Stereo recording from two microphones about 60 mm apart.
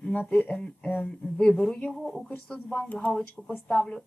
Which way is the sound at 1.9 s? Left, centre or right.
Centre.